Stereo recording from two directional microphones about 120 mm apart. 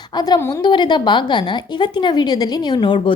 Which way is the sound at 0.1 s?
35° left (ahead or behind).